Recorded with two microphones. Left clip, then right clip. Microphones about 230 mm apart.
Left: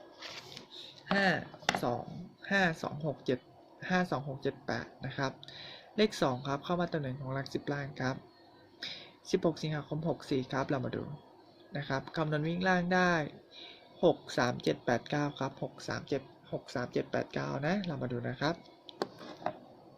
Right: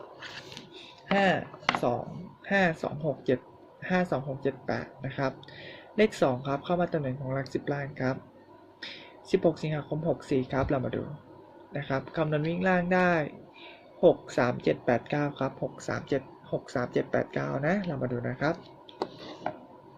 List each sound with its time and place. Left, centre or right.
1.1 s speech: left